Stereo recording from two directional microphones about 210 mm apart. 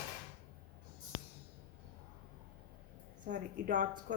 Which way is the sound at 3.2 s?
40° right (ahead or behind).